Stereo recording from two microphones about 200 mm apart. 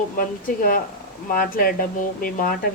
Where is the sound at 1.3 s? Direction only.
45° left (ahead or behind).